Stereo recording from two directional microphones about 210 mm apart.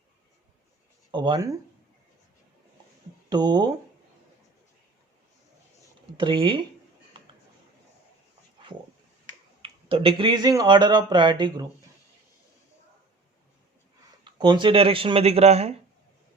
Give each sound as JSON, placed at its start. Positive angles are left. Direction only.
{"t": 1.1, "sound": "speech", "side_deg": -25}
{"t": 3.2, "sound": "speech", "side_deg": -20}
{"t": 6.1, "sound": "speech", "side_deg": -25}
{"t": 9.6, "sound": "speech", "side_deg": -25}
{"t": 14.3, "sound": "speech", "side_deg": -20}